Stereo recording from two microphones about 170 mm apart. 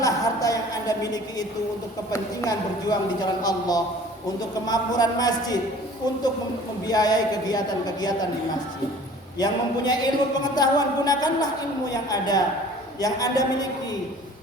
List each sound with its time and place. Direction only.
0.0 s a sound: 20° left (ahead or behind)
2.1 s a man's voice: 20° left (ahead or behind)
6.8 s a man's voice: 25° left (ahead or behind)
9.4 s a man's voice: 25° left (ahead or behind)